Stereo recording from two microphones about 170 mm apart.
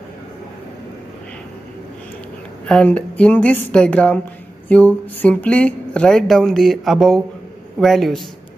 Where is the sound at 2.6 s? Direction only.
5° left (ahead or behind).